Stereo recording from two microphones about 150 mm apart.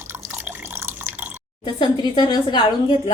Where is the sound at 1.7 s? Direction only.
30° left (ahead or behind).